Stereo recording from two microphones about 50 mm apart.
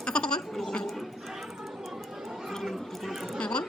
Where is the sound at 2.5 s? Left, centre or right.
Centre.